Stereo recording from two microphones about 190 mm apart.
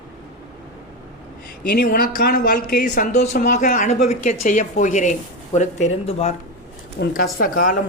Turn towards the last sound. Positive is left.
turn(degrees=45)  # may be behind; listen again after turning